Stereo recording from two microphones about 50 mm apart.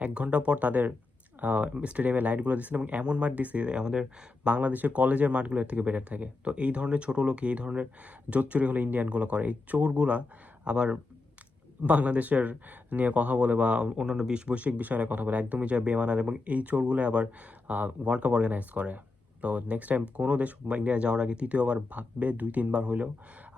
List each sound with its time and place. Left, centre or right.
0.0 s speech: right